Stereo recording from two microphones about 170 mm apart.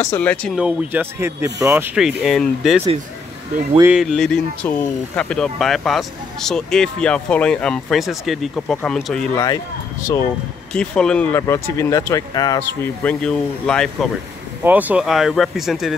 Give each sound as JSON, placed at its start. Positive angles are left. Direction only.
{"t": 0.0, "sound": "speech", "side_deg": 10}
{"t": 0.6, "sound": "speech", "side_deg": -5}
{"t": 1.7, "sound": "speech", "side_deg": -5}
{"t": 3.8, "sound": "speech", "side_deg": -5}
{"t": 10.7, "sound": "speech", "side_deg": 5}
{"t": 11.4, "sound": "speech", "side_deg": 15}
{"t": 13.0, "sound": "speech", "side_deg": 5}
{"t": 14.6, "sound": "speech", "side_deg": -10}